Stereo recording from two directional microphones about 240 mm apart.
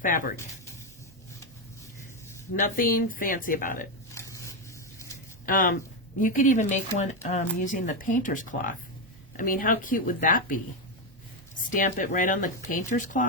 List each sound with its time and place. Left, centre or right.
0.0 s speech: left
2.6 s speech: left
4.1 s a sound: centre
5.5 s speech: left
11.7 s speech: left